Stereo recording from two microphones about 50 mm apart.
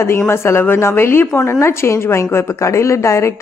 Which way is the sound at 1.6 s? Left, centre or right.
Left.